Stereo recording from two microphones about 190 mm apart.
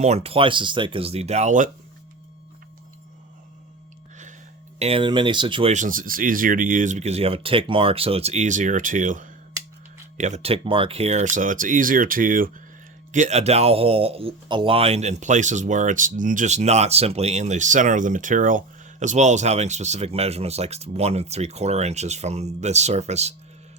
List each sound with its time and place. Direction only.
0.0 s speech: 35° right (ahead or behind)
4.8 s speech: 30° right (ahead or behind)
5.7 s speech: 45° right (ahead or behind)